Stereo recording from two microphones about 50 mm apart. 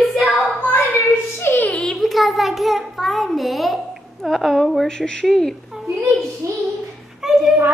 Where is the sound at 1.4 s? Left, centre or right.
Left.